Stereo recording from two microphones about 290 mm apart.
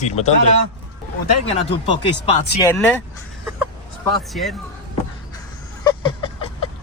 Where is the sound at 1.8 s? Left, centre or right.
Centre.